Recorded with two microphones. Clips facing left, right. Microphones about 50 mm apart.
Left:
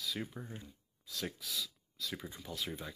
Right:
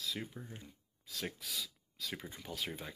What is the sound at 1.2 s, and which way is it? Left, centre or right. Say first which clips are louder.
Speech: left 1 dB; right.